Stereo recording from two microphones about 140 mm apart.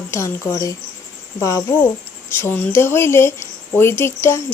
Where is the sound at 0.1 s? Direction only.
20° left (ahead or behind).